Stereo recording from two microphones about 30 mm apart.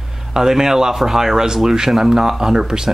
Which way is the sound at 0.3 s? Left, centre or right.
Centre.